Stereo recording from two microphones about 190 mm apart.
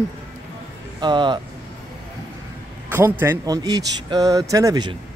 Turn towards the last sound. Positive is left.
turn(degrees=-20)  # may be behind; listen again after turning